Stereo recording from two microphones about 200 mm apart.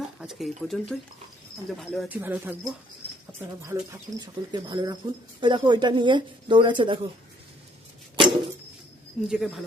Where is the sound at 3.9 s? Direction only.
20° right (ahead or behind).